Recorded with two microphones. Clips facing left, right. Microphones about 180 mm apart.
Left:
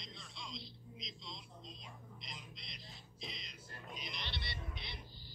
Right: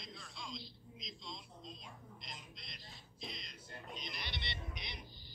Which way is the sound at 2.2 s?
Centre (ahead or behind).